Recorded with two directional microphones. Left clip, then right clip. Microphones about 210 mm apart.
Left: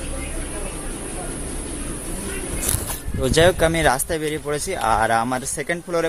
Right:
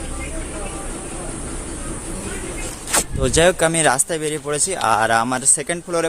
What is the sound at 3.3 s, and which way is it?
Speech, centre (ahead or behind).